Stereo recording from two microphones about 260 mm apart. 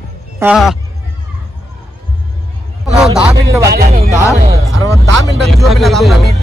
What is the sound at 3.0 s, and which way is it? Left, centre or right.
Speech, centre.